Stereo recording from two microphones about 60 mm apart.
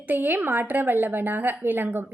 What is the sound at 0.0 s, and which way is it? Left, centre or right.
A woman's voice, right.